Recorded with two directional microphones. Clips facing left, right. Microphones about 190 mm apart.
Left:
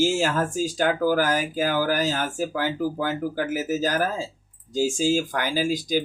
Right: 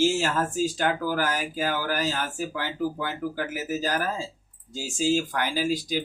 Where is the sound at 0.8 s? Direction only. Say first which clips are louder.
Left 5 dB; 45° left (ahead or behind).